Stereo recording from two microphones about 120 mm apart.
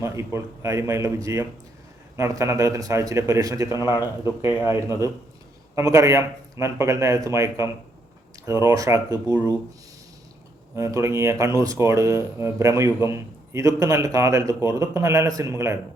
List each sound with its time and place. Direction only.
0.0 s speech: 25° right (ahead or behind)
3.7 s a man's voice: 30° left (ahead or behind)
4.0 s speech: 20° right (ahead or behind)
5.7 s speech: 25° right (ahead or behind)
10.8 s speech: 25° right (ahead or behind)